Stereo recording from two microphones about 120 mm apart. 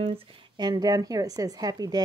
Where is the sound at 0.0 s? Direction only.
50° right (ahead or behind).